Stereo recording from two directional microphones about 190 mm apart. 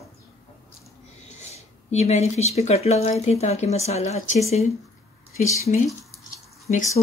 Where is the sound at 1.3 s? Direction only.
35° left (ahead or behind).